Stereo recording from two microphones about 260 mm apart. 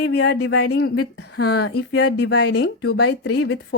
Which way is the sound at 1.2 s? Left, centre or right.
Left.